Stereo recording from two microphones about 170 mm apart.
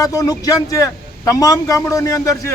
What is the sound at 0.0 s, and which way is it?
Speech, 20° left (ahead or behind).